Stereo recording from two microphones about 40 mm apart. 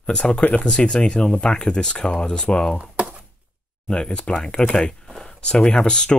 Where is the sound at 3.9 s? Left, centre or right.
Left.